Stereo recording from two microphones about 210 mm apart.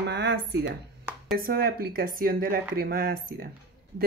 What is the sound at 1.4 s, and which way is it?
Speech, 45° right (ahead or behind).